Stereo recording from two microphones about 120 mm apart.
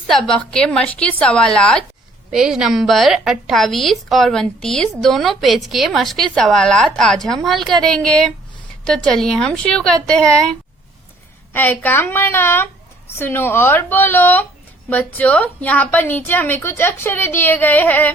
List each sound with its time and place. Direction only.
0.1 s a woman's voice: 5° left (ahead or behind)
2.3 s a woman's voice: 5° right (ahead or behind)
11.5 s a woman's voice: 15° left (ahead or behind)